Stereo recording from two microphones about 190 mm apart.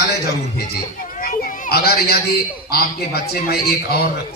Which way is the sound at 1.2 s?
50° left (ahead or behind).